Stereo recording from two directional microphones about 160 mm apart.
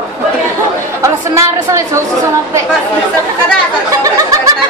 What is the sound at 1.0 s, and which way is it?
Speech, 20° right (ahead or behind).